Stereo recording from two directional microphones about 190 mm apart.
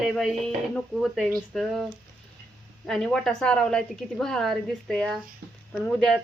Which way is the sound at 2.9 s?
Centre (ahead or behind).